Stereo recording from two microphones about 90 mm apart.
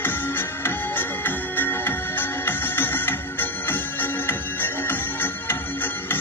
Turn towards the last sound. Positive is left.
turn(degrees=25)  # may be behind; listen again after turning